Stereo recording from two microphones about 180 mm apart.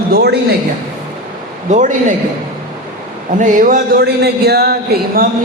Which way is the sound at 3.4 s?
45° right (ahead or behind).